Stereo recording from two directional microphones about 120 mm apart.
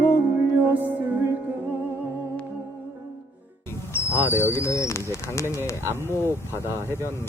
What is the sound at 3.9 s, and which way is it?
Speech, 20° left (ahead or behind).